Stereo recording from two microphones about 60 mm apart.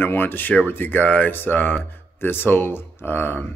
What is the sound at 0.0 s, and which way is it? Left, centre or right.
A man's voice, left.